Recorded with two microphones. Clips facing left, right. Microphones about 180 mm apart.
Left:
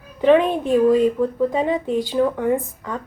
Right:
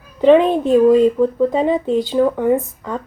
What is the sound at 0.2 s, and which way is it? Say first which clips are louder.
A woman's voice: right 4 dB; 30° right (ahead or behind).